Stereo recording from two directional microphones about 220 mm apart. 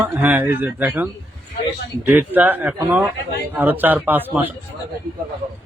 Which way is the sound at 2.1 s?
10° right (ahead or behind).